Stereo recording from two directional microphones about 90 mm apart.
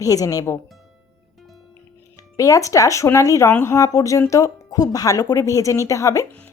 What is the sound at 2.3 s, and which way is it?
A woman's voice, 40° left (ahead or behind).